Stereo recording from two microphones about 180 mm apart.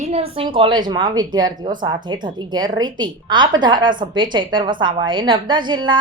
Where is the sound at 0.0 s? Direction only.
35° right (ahead or behind).